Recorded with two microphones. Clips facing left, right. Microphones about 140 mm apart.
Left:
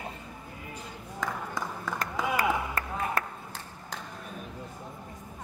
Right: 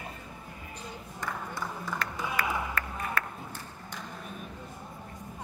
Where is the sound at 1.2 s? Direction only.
90° left.